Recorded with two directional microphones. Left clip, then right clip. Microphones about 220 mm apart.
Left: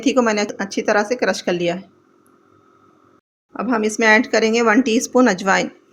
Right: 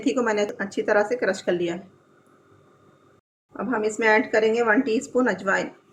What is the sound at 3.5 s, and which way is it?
Speech, 40° left (ahead or behind).